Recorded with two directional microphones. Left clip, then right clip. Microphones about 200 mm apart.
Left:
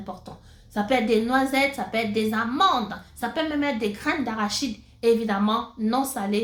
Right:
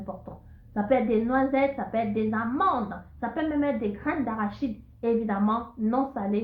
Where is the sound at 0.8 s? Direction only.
20° left (ahead or behind).